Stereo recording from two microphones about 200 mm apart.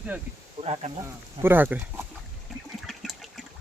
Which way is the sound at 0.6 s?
35° right (ahead or behind).